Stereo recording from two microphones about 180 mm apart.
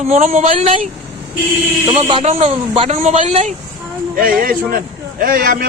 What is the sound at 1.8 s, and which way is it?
Speech, 30° right (ahead or behind).